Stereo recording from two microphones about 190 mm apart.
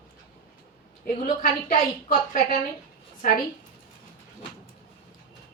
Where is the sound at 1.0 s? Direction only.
45° left (ahead or behind).